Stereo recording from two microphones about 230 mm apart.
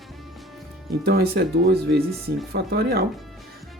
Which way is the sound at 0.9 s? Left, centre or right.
Right.